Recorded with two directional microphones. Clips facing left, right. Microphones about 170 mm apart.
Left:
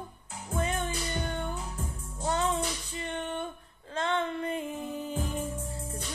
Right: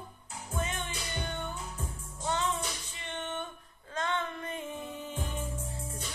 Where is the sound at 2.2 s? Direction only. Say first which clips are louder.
Left 4 dB; 35° left (ahead or behind).